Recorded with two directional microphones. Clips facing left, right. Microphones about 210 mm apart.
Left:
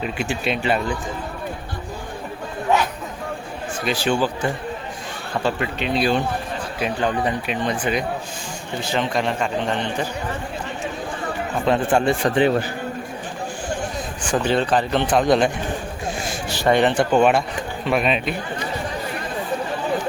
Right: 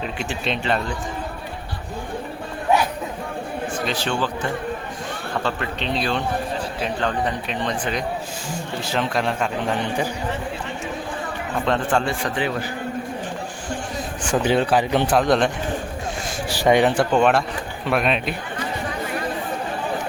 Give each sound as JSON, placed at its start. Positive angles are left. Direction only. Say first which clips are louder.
{"t": 0.0, "sound": "speech", "louder": "left 2 dB", "side_deg": 5}
{"t": 3.8, "sound": "speech", "louder": "left 6 dB", "side_deg": 10}
{"t": 5.4, "sound": "a man's voice", "louder": "left 4 dB", "side_deg": 10}
{"t": 11.6, "sound": "speech", "louder": "left 3 dB", "side_deg": 10}
{"t": 14.3, "sound": "speech", "louder": "right 1 dB", "side_deg": -10}
{"t": 15.2, "sound": "a man's voice", "louder": "left 4 dB", "side_deg": 0}
{"t": 16.5, "sound": "a sound", "louder": "right 1 dB", "side_deg": -10}
{"t": 17.0, "sound": "a man's voice", "louder": "left 1 dB", "side_deg": 5}